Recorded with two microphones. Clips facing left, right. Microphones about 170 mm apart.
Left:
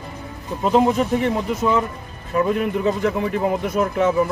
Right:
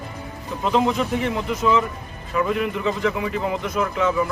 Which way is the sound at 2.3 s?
40° left (ahead or behind).